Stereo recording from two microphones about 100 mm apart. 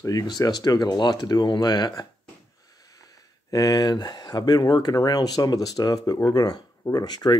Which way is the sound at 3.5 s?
35° left (ahead or behind).